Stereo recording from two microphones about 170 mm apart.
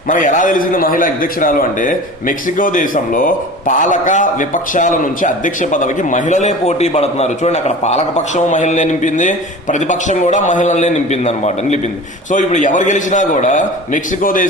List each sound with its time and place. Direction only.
0.1 s a man's voice: 50° left (ahead or behind)